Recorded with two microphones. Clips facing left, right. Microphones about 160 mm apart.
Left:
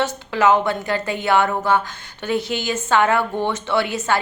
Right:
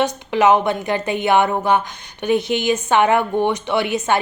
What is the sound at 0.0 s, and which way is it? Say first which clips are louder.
Speech: right 2 dB; 20° right (ahead or behind).